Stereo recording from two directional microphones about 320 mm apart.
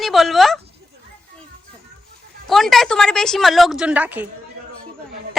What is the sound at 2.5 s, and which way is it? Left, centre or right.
A woman's voice, centre.